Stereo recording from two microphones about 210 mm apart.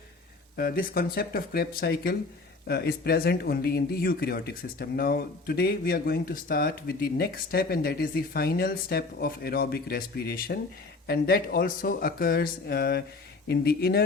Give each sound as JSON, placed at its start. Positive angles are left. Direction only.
{"t": 0.5, "sound": "speech", "side_deg": 45}